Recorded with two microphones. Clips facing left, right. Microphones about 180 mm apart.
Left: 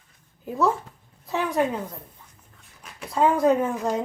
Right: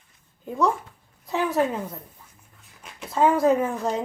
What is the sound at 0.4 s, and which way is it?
A woman's voice, 5° left (ahead or behind).